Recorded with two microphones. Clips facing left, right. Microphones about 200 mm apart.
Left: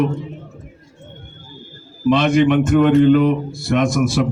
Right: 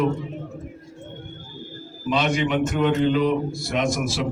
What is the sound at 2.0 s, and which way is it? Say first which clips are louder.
A man's voice: left 8 dB; 50° left (ahead or behind).